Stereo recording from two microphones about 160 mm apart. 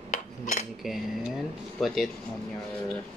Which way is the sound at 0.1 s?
50° left (ahead or behind).